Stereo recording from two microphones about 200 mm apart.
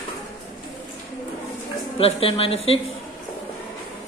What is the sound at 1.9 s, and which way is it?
Speech, 30° left (ahead or behind).